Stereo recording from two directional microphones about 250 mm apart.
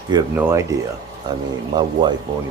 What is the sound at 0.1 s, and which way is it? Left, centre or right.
Speech, centre.